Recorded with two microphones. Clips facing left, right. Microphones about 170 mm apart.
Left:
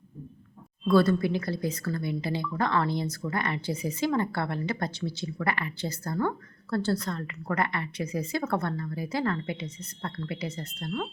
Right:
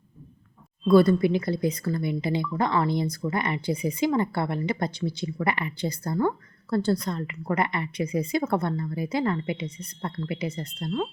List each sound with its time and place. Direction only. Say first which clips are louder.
0.9 s speech: right 4 dB; 15° right (ahead or behind)